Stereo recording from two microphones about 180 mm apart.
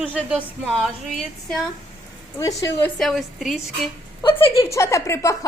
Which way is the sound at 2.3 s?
15° left (ahead or behind).